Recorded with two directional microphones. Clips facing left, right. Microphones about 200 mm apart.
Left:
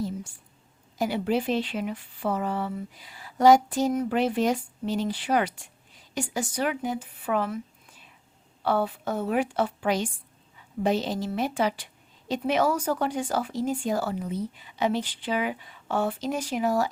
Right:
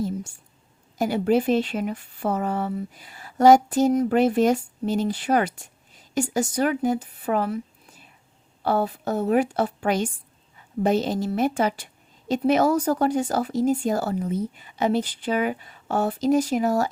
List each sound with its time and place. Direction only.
0.9 s speech: 45° right (ahead or behind)